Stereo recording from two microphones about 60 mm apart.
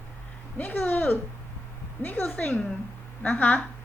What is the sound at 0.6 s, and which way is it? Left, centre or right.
A woman's voice, left.